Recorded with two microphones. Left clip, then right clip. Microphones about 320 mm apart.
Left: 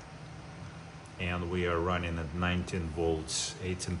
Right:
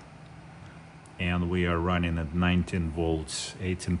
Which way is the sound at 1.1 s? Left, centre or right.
Right.